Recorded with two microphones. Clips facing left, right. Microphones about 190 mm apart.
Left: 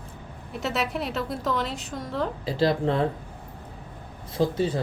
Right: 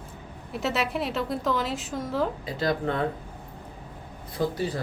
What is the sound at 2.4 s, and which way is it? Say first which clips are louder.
Speech: left 4 dB; 30° left (ahead or behind).